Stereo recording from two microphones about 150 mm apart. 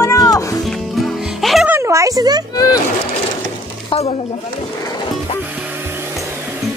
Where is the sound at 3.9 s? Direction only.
40° left (ahead or behind).